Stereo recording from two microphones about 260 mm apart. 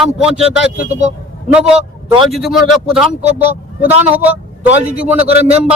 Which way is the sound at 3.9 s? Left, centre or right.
Right.